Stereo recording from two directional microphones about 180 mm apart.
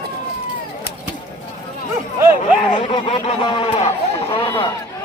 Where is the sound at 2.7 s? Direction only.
30° left (ahead or behind).